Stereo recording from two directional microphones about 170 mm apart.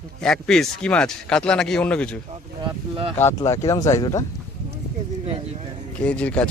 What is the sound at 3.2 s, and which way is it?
Speech, 15° left (ahead or behind).